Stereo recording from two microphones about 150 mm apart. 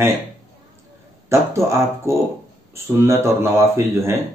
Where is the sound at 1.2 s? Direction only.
20° right (ahead or behind).